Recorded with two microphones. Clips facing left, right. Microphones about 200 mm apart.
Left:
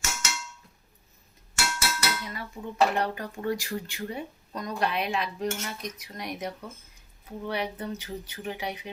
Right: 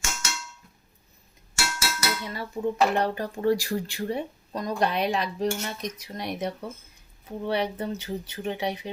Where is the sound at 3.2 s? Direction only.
35° right (ahead or behind).